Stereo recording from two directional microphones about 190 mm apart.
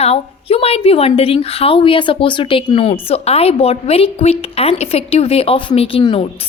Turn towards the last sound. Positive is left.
turn(degrees=30)  # may be behind; listen again after turning